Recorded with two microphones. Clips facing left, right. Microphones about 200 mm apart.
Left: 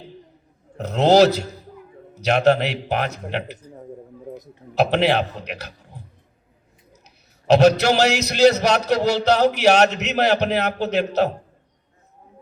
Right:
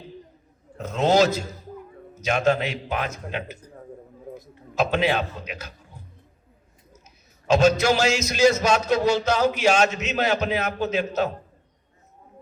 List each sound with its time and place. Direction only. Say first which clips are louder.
0.9 s a man's voice: left 5 dB; 65° left (ahead or behind)
4.7 s a man's voice: left 4 dB; 65° left (ahead or behind)
7.4 s a man's voice: left 4 dB; 65° left (ahead or behind)